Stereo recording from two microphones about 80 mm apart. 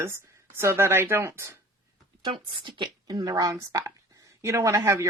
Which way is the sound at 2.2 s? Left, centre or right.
Right.